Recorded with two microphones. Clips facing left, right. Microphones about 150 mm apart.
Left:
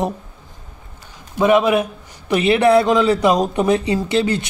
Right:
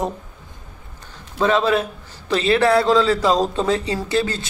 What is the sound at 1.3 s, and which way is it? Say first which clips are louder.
A man's voice: left 3 dB; 15° left (ahead or behind).